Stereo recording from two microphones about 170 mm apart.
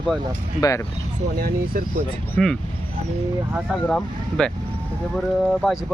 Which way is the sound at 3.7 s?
5° left (ahead or behind).